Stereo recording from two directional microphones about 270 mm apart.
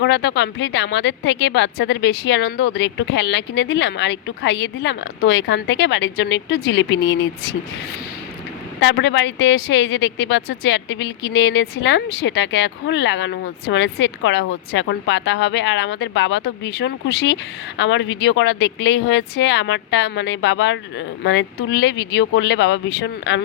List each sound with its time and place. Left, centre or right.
0.0 s speech: left
8.8 s speech: left